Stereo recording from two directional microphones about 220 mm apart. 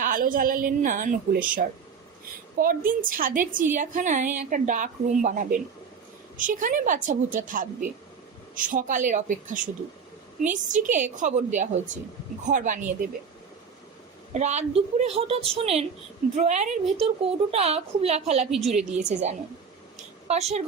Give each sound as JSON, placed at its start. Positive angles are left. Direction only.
{"t": 0.0, "sound": "speech", "side_deg": -40}
{"t": 14.3, "sound": "a woman's voice", "side_deg": -30}